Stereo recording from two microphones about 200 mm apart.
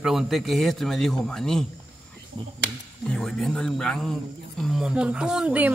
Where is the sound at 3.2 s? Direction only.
5° left (ahead or behind).